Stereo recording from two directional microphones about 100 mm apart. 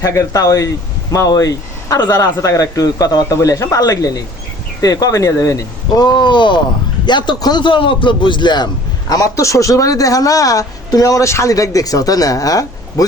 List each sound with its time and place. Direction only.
0.0 s a man's voice: 35° left (ahead or behind)